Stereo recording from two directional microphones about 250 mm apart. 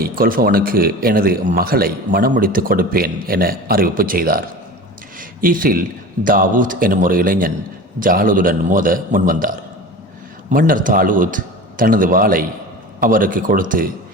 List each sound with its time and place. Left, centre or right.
0.0 s a man's voice: right